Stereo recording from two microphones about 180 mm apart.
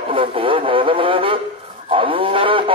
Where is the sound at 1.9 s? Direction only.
30° right (ahead or behind).